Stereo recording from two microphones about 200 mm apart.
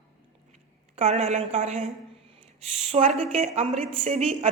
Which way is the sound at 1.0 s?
35° right (ahead or behind).